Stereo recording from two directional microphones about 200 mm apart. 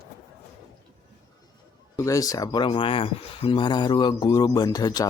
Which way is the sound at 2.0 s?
15° left (ahead or behind).